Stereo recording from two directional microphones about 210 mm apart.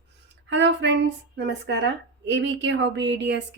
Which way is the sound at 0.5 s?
60° right (ahead or behind).